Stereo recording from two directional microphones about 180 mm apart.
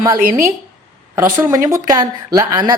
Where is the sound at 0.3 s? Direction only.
45° right (ahead or behind).